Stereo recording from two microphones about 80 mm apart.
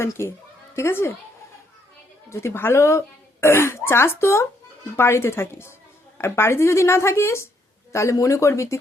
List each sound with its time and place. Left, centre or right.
0.0 s speech: left
2.3 s speech: left